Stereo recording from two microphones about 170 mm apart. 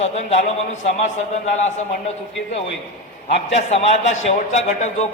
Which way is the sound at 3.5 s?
40° left (ahead or behind).